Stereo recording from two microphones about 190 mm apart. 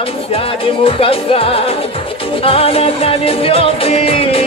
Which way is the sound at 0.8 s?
30° left (ahead or behind).